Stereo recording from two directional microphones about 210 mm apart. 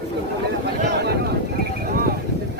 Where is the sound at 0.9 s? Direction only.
50° right (ahead or behind).